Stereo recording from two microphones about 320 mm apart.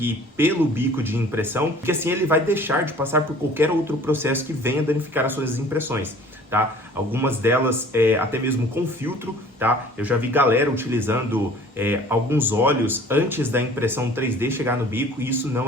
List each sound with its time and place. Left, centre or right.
0.0 s speech: centre